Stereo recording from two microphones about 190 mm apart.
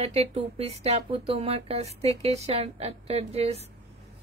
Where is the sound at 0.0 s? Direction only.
35° right (ahead or behind).